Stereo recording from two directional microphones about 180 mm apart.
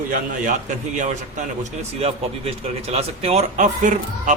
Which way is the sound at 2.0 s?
35° right (ahead or behind).